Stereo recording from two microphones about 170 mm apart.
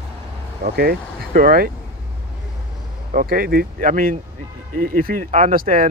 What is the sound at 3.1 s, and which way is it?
Speech, 55° right (ahead or behind).